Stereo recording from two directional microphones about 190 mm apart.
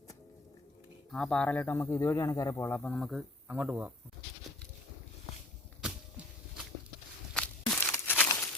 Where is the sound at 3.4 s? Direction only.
10° right (ahead or behind).